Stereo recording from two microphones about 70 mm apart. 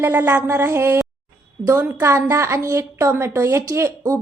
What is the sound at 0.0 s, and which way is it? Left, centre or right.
A woman's voice, right.